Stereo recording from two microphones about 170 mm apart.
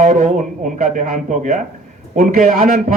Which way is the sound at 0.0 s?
45° right (ahead or behind).